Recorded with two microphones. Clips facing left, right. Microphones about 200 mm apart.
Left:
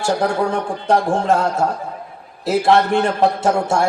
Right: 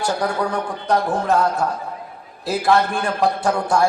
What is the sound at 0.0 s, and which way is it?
A man's voice, 25° left (ahead or behind).